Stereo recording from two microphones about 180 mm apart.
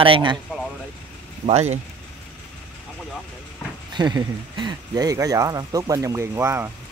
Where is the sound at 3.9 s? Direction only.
25° right (ahead or behind).